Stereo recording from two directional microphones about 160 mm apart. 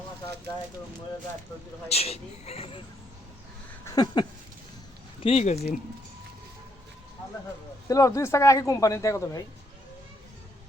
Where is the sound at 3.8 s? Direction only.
25° left (ahead or behind).